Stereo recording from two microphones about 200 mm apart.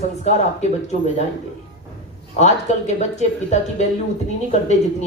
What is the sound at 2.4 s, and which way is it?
A woman's voice, 35° left (ahead or behind).